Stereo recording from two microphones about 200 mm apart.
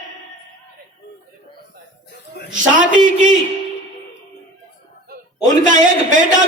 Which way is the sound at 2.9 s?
40° right (ahead or behind).